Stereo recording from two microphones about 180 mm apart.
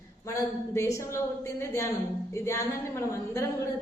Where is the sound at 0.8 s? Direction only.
15° left (ahead or behind).